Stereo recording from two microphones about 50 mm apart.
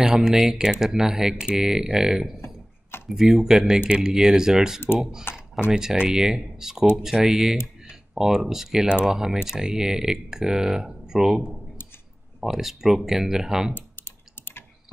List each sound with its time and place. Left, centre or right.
0.0 s speech: centre
8.8 s speech: centre
13.7 s typing: left